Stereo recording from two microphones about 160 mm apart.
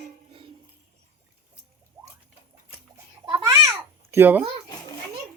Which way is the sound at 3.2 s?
20° right (ahead or behind).